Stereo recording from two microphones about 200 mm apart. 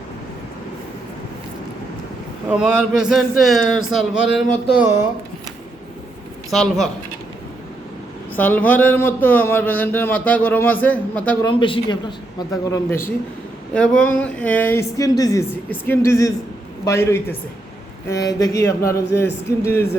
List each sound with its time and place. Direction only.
2.5 s speech: 5° right (ahead or behind)
6.5 s speech: centre (ahead or behind)
8.3 s speech: 10° left (ahead or behind)
11.4 s speech: 25° left (ahead or behind)